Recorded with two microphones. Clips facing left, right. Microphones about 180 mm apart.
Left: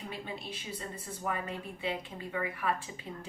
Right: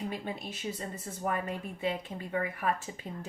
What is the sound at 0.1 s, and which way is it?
A woman's voice, 45° right (ahead or behind).